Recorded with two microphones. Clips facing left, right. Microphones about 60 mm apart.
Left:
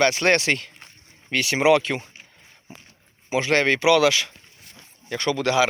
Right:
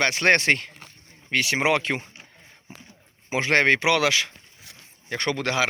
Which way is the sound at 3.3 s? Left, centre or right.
Right.